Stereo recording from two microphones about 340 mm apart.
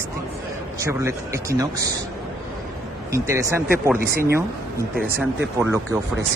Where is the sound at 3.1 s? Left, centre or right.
Centre.